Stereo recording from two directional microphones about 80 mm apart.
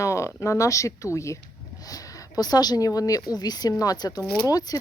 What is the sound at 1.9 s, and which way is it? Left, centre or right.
A woman's voice, left.